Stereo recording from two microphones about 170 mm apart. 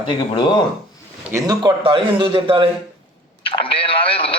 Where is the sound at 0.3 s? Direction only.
25° left (ahead or behind).